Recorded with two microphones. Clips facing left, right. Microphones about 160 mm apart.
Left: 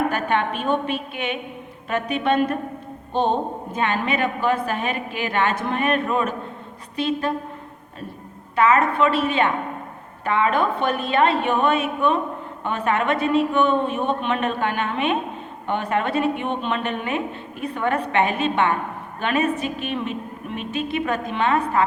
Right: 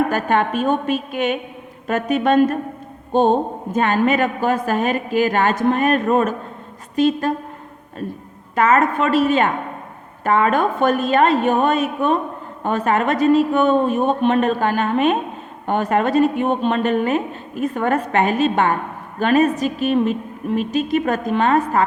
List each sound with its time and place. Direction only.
0.1 s a woman's voice: 40° right (ahead or behind)
8.5 s a woman's voice: 45° right (ahead or behind)